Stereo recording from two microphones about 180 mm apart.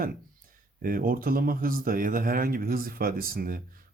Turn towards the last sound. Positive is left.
turn(degrees=-55)  # may be behind; listen again after turning